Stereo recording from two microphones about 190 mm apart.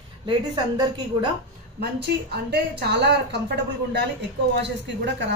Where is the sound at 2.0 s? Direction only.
60° right (ahead or behind).